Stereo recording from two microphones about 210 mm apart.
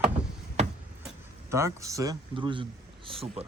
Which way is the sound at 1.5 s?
15° right (ahead or behind).